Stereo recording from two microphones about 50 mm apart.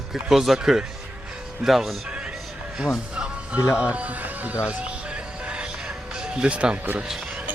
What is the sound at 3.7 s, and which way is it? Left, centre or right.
Speech, right.